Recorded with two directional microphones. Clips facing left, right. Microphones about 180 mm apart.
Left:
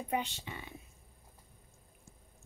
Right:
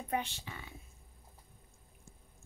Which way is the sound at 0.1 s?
15° left (ahead or behind).